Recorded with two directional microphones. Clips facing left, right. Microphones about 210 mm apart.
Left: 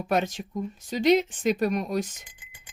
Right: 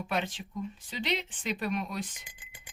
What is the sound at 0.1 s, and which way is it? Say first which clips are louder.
Speech: left 9 dB; 45° left (ahead or behind).